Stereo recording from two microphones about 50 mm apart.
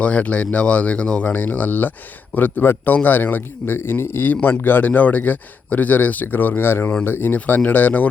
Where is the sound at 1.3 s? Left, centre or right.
Left.